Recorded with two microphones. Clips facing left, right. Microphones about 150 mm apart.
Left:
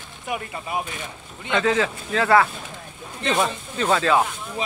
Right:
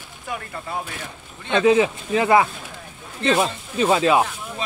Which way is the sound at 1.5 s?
20° right (ahead or behind).